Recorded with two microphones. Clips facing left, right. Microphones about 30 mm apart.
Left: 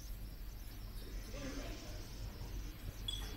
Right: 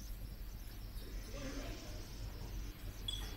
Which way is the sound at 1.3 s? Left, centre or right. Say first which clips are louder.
Even; centre.